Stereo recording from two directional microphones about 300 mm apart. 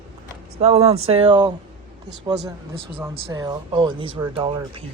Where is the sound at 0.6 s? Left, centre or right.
Right.